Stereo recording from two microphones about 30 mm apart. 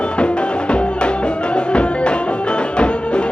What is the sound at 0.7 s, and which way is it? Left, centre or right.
Music, left.